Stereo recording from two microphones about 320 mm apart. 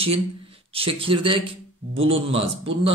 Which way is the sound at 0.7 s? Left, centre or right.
Centre.